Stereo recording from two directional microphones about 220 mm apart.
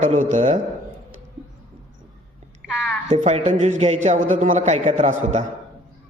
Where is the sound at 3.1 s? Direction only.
30° right (ahead or behind).